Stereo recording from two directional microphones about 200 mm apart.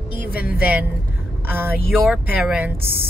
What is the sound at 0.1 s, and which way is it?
Music, 10° right (ahead or behind).